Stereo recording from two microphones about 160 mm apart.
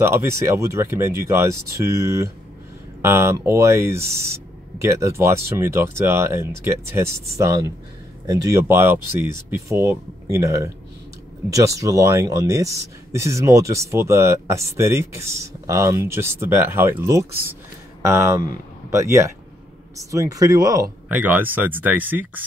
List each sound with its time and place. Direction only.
0.1 s speech: 15° right (ahead or behind)
21.1 s speech: 10° right (ahead or behind)